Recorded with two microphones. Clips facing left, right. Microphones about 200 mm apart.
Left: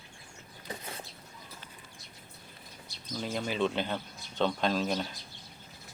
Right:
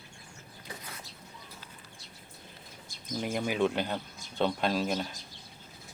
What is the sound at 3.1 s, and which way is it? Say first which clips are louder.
Bird: right 2 dB; 15° right (ahead or behind).